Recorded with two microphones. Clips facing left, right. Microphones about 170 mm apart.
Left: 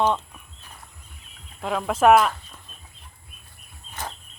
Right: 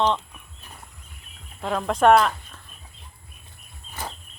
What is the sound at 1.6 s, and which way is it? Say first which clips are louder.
Speech: even; 5° left (ahead or behind).